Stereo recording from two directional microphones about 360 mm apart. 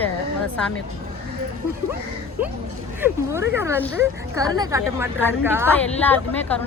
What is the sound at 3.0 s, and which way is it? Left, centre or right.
Speech, centre.